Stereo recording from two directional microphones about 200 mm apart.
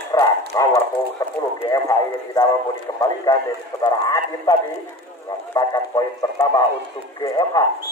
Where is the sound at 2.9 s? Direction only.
20° left (ahead or behind).